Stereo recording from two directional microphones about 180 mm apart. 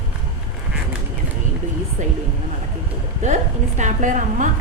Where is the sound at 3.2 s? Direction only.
40° right (ahead or behind).